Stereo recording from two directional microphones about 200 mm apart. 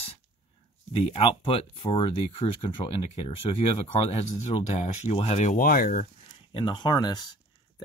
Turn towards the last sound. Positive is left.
turn(degrees=20)  # may be behind; listen again after turning